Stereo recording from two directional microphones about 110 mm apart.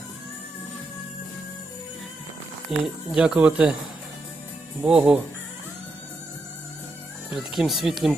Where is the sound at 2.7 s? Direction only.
5° right (ahead or behind).